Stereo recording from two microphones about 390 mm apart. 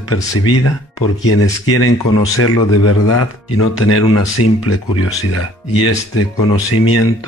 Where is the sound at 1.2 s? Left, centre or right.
Left.